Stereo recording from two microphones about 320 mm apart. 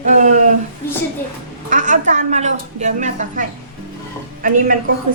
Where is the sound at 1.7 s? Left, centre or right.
Right.